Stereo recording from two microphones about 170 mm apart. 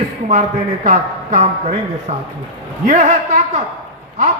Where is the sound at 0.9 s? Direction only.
45° right (ahead or behind).